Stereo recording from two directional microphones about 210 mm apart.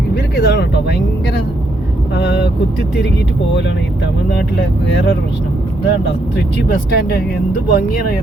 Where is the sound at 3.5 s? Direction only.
55° left (ahead or behind).